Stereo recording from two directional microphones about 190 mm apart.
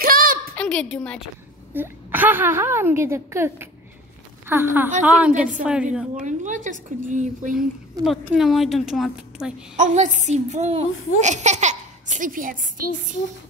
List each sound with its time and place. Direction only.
0.0 s a sound: 50° right (ahead or behind)
0.6 s a sound: 5° left (ahead or behind)
0.9 s a woman's voice: 5° left (ahead or behind)
1.7 s a woman's voice: 10° right (ahead or behind)
6.2 s a child's voice: 40° right (ahead or behind)
8.0 s a woman's voice: centre (ahead or behind)
9.8 s a child's voice: 40° right (ahead or behind)